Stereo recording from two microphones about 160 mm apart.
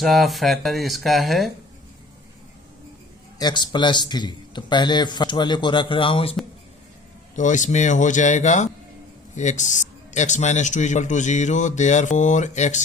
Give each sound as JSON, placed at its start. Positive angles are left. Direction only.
{"t": 0.0, "sound": "speech", "side_deg": 0}
{"t": 3.3, "sound": "a man's voice", "side_deg": 25}
{"t": 7.3, "sound": "a man's voice", "side_deg": 50}